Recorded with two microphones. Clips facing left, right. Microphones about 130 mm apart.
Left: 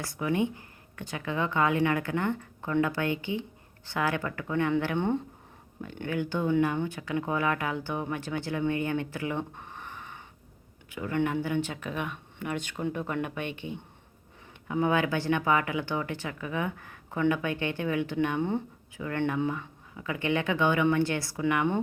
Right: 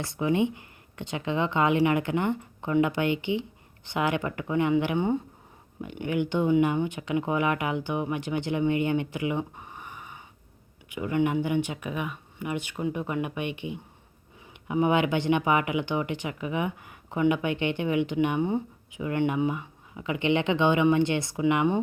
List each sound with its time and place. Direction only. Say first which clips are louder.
0.0 s speech: right 3 dB; 25° right (ahead or behind)